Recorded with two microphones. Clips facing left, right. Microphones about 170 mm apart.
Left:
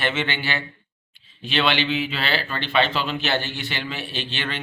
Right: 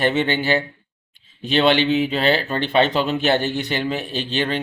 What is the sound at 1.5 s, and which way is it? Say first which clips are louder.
A man's voice: right 6 dB; 40° right (ahead or behind).